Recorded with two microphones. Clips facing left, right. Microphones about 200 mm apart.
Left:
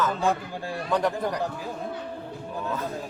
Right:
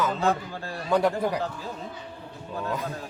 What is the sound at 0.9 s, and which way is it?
Speech, 10° right (ahead or behind).